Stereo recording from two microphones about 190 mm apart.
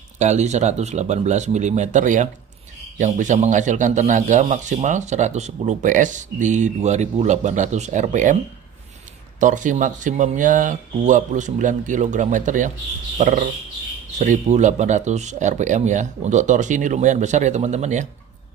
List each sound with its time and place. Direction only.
0.2 s a man's voice: 35° right (ahead or behind)
9.4 s a man's voice: 40° right (ahead or behind)